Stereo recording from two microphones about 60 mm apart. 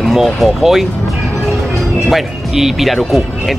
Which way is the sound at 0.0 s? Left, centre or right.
Centre.